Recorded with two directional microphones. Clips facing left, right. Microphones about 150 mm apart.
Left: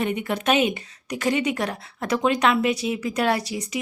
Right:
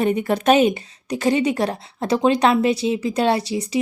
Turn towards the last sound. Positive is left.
turn(degrees=-30)  # may be behind; listen again after turning